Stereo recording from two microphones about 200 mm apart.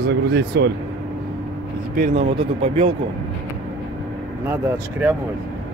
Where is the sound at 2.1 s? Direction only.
30° right (ahead or behind).